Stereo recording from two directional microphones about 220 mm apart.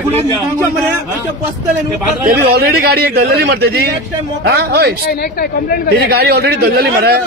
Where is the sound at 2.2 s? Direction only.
45° right (ahead or behind).